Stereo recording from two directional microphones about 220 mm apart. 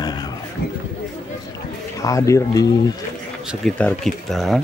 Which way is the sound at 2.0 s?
15° left (ahead or behind).